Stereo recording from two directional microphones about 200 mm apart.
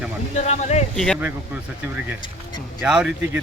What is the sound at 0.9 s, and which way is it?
Speech, centre (ahead or behind).